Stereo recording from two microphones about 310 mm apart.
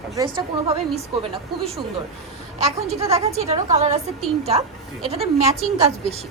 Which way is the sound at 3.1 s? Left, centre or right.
Centre.